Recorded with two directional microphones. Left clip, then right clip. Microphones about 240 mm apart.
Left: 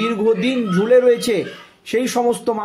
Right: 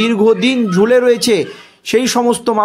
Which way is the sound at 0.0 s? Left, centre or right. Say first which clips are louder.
Right 6 dB; right.